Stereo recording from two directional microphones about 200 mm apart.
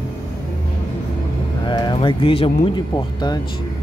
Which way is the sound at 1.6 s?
20° left (ahead or behind).